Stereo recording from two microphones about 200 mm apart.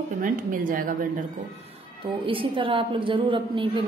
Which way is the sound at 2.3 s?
25° right (ahead or behind).